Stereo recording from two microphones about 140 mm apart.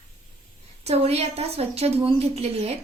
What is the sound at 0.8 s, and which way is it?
A woman's voice, 50° right (ahead or behind).